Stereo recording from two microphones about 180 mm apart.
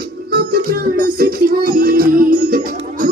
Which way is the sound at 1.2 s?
55° right (ahead or behind).